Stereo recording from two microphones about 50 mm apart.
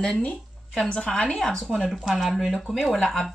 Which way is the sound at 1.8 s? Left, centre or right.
Centre.